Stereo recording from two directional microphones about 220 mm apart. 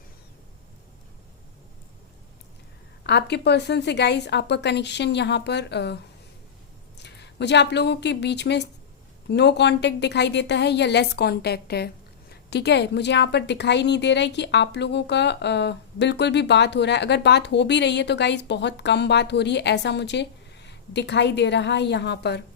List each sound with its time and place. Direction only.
3.0 s a woman's voice: 50° left (ahead or behind)
7.0 s a woman's voice: 50° left (ahead or behind)